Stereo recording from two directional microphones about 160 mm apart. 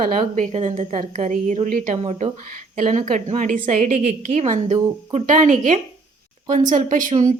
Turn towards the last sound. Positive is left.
turn(degrees=-55)  # may be behind; listen again after turning